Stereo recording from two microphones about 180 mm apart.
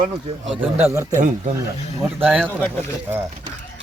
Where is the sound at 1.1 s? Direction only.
45° right (ahead or behind).